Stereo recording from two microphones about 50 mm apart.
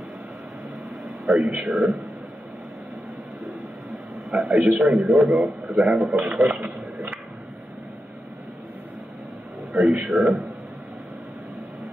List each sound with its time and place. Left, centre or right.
1.5 s a man's voice: right
4.4 s a man's voice: right
6.1 s a sound: right
9.7 s a man's voice: right